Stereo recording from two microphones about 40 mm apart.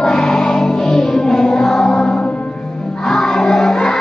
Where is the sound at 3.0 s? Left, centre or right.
Centre.